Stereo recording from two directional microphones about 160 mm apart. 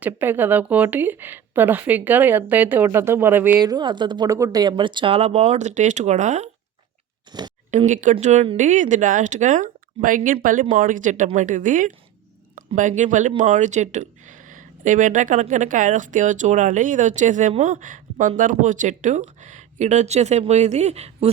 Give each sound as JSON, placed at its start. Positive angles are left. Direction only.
{"t": 0.0, "sound": "speech", "side_deg": -10}
{"t": 3.6, "sound": "speech", "side_deg": -25}
{"t": 7.3, "sound": "speech", "side_deg": -25}
{"t": 7.9, "sound": "speech", "side_deg": -50}